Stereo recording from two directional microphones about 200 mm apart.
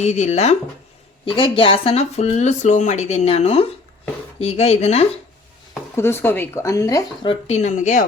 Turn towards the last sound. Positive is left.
turn(degrees=40)  # may be behind; listen again after turning